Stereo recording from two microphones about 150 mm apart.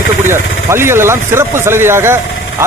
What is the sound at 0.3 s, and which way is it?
A man's voice, 15° right (ahead or behind).